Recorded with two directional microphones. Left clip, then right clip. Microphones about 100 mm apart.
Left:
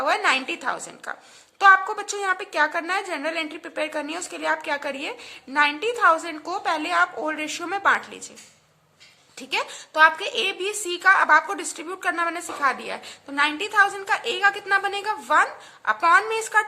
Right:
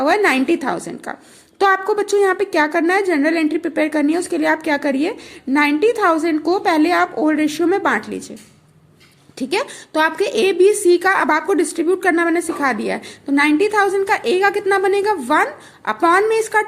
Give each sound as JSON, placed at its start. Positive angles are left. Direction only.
{"t": 0.0, "sound": "a woman's voice", "side_deg": -45}
{"t": 9.4, "sound": "a woman's voice", "side_deg": -45}